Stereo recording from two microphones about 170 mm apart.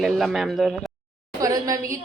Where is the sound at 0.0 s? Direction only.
Centre (ahead or behind).